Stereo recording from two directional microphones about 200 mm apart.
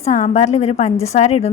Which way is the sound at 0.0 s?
35° left (ahead or behind).